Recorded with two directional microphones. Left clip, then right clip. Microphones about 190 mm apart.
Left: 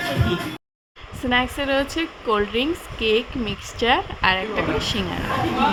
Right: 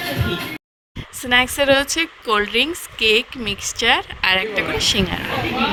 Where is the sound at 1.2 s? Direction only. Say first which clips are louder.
Right 6 dB; 35° right (ahead or behind).